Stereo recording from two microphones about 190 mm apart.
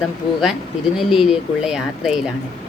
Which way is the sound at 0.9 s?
5° right (ahead or behind).